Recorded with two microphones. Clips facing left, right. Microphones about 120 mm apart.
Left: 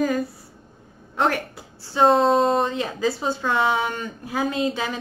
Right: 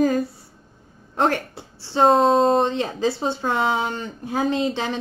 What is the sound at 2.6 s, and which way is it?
A woman's voice, 30° right (ahead or behind).